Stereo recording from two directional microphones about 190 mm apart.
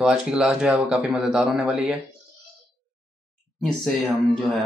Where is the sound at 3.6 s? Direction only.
Centre (ahead or behind).